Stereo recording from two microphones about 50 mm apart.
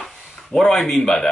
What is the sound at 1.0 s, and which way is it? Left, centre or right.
Speech, centre.